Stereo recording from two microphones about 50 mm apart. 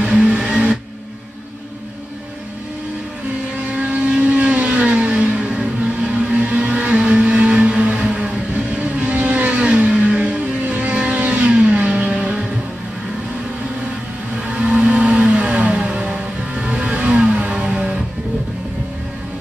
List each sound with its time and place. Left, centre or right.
0.0 s music: centre
3.7 s vehicle: right
10.6 s vehicle: right
12.1 s music: centre
14.5 s vehicle: centre
17.6 s music: centre